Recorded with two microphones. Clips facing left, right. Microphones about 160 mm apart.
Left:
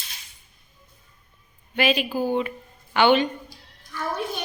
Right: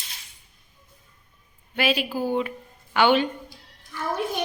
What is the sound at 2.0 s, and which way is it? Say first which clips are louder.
Speech: left 2 dB; 15° left (ahead or behind).